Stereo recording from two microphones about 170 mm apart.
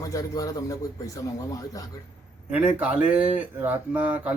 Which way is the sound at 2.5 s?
10° right (ahead or behind).